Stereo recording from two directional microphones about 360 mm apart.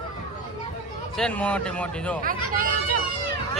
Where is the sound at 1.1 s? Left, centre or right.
Centre.